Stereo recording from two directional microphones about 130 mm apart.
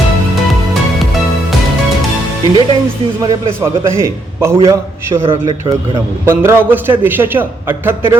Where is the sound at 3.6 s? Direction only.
20° right (ahead or behind).